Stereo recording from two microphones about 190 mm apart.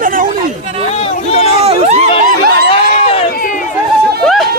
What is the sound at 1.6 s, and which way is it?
Speech, 30° right (ahead or behind).